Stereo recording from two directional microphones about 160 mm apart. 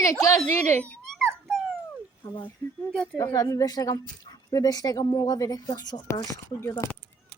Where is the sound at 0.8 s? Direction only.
5° left (ahead or behind).